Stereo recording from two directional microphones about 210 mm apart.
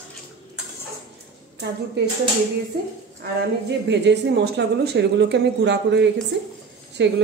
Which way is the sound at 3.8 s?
55° right (ahead or behind).